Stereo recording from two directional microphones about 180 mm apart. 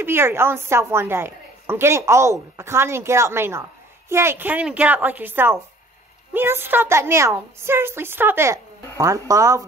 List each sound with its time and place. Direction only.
0.0 s a woman's voice: 15° right (ahead or behind)